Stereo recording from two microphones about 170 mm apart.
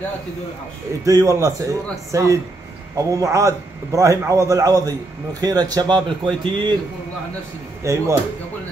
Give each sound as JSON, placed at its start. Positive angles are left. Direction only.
{"t": 1.0, "sound": "a man's voice", "side_deg": -20}
{"t": 7.8, "sound": "speech", "side_deg": -20}